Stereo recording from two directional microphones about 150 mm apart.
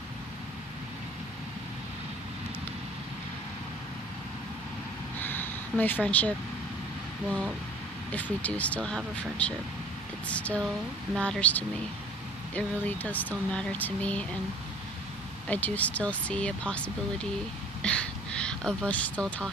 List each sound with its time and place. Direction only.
5.2 s a sound: 15° left (ahead or behind)
8.1 s speech: 10° left (ahead or behind)
15.4 s speech: 10° left (ahead or behind)